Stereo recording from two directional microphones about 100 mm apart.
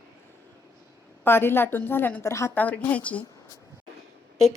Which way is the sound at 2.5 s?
15° left (ahead or behind).